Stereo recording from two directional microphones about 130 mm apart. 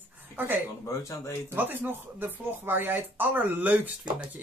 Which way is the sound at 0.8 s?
25° left (ahead or behind).